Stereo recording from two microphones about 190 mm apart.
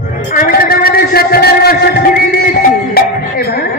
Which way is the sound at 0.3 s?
50° left (ahead or behind).